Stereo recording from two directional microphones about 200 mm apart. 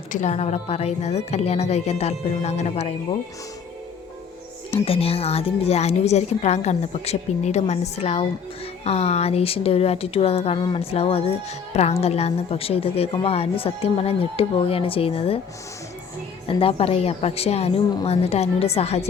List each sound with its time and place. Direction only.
0.1 s a woman's voice: 35° left (ahead or behind)
4.7 s a woman's voice: 30° left (ahead or behind)
16.5 s a woman's voice: 30° left (ahead or behind)